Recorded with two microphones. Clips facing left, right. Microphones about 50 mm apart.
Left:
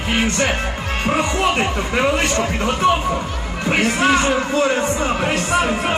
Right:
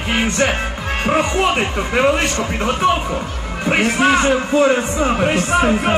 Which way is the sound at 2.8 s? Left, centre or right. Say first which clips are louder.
Left 1 dB; centre.